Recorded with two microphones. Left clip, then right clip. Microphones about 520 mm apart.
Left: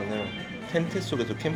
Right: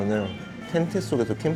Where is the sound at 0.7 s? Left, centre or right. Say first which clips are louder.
Right 4 dB; centre.